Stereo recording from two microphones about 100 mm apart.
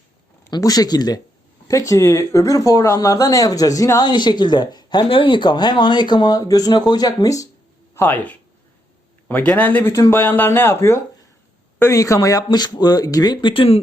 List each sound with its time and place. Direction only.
0.5 s speech: 40° left (ahead or behind)
7.9 s a man's voice: 20° left (ahead or behind); by 13.5 s 45° left (ahead or behind)
13.5 s speech: 70° left (ahead or behind)